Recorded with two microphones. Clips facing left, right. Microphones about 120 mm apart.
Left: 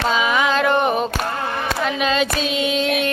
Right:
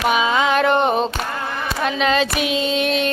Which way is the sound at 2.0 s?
30° right (ahead or behind).